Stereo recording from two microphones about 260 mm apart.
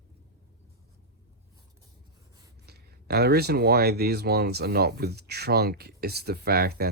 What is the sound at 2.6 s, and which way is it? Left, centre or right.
Speech, right.